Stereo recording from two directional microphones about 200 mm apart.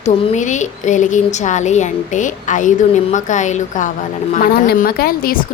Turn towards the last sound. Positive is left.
turn(degrees=50)  # may be behind; listen again after turning